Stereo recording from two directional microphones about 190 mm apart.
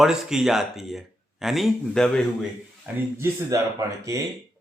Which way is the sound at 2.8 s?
15° right (ahead or behind).